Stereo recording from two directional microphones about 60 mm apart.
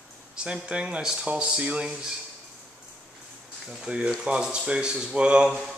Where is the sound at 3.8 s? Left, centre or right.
Centre.